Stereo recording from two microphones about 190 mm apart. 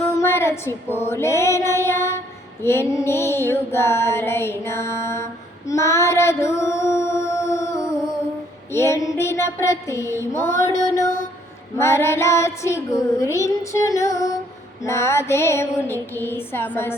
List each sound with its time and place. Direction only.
0.2 s female singing: 15° left (ahead or behind)
8.7 s child singing: 15° left (ahead or behind)